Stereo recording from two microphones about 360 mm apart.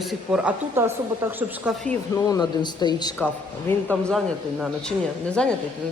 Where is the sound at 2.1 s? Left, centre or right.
Centre.